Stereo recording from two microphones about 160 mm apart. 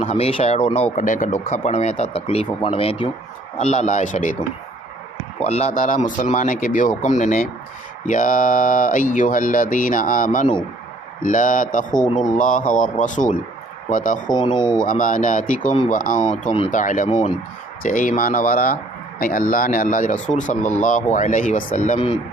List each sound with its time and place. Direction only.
0.0 s speech: 40° left (ahead or behind)
0.9 s speech: 55° left (ahead or behind)
5.4 s speech: 40° left (ahead or behind); by 11.9 s 55° left (ahead or behind)
12.0 s speech: 25° left (ahead or behind)
12.4 s speech: 55° left (ahead or behind)
14.3 s speech: 25° left (ahead or behind)
14.8 s speech: 55° left (ahead or behind)
17.1 s speech: 35° left (ahead or behind)
17.8 s speech: 55° left (ahead or behind)